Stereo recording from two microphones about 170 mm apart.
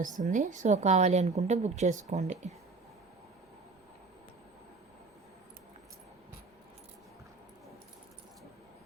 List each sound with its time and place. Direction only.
0.0 s a woman's voice: 50° right (ahead or behind)